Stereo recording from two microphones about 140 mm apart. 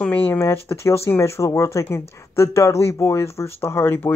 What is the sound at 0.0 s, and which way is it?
Speech, 10° left (ahead or behind).